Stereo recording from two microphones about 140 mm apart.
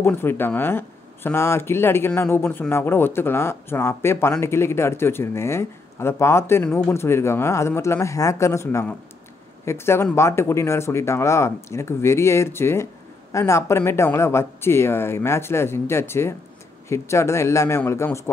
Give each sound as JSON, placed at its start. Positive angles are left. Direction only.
{"t": 0.0, "sound": "speech", "side_deg": 15}